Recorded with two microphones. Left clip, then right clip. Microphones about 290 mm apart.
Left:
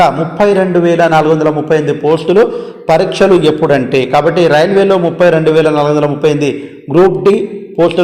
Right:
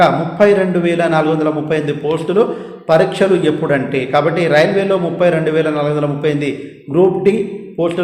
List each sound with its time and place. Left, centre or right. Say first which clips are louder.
0.0 s a man's voice: left 2 dB; centre
7.8 s a man's voice: left 7 dB; centre